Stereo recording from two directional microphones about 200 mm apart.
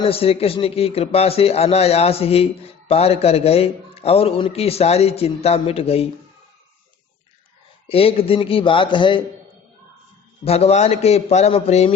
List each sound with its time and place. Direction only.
0.0 s a man's voice: 30° left (ahead or behind)
7.9 s a man's voice: 30° left (ahead or behind)
10.4 s a man's voice: 30° left (ahead or behind)